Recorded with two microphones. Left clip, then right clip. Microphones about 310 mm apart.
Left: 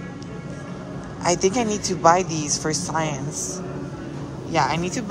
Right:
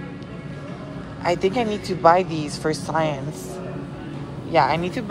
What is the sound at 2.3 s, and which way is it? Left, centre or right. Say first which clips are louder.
Speech: left 3 dB; left.